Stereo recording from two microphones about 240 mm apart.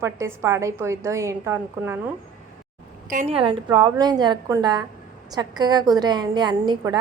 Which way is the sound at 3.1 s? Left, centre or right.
Right.